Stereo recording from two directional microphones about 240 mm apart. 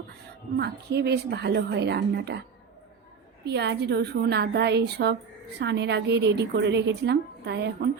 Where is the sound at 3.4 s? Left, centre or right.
Right.